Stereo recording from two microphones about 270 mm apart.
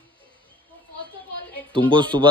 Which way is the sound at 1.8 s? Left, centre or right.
Centre.